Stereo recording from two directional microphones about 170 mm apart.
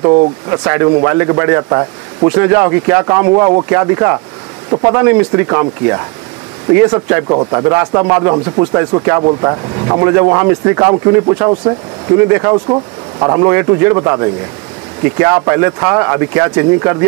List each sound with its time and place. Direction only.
0.0 s speech: 30° right (ahead or behind)
0.5 s a man's voice: 20° right (ahead or behind)
12.6 s a man's voice: 25° right (ahead or behind)